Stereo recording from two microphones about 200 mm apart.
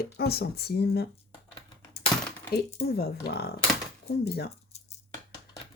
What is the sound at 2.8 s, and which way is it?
Speech, 50° left (ahead or behind).